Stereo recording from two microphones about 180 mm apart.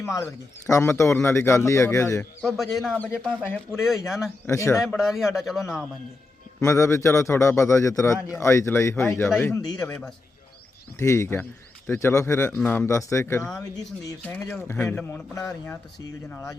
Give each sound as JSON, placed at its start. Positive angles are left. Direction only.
{"t": 0.2, "sound": "a man's voice", "side_deg": 15}
{"t": 2.6, "sound": "a man's voice", "side_deg": 0}
{"t": 4.4, "sound": "a man's voice", "side_deg": 15}
{"t": 4.8, "sound": "a man's voice", "side_deg": 0}
{"t": 6.6, "sound": "a man's voice", "side_deg": 15}
{"t": 10.9, "sound": "a man's voice", "side_deg": 15}
{"t": 14.2, "sound": "a man's voice", "side_deg": 10}